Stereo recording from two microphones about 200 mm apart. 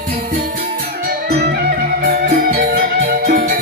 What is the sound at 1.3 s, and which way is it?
Music, 55° right (ahead or behind).